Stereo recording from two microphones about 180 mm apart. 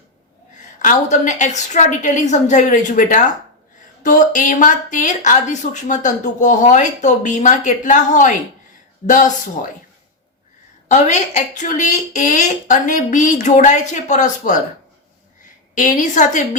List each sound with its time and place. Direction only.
0.8 s a woman's voice: 45° left (ahead or behind)
10.8 s a woman's voice: 40° left (ahead or behind)
15.7 s a woman's voice: 45° left (ahead or behind)